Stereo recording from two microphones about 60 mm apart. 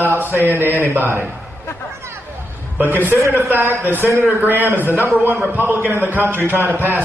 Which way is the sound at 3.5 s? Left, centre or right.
Right.